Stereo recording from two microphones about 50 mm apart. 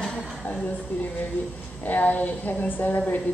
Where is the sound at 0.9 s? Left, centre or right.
Left.